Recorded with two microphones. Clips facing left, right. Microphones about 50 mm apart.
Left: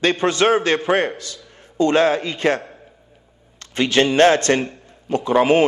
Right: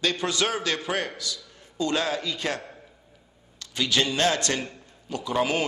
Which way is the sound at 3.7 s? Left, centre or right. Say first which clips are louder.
Left 8 dB; left.